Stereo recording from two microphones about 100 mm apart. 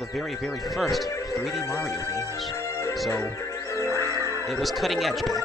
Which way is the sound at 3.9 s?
30° right (ahead or behind).